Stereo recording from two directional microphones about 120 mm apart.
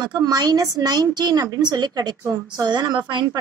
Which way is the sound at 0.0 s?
35° right (ahead or behind).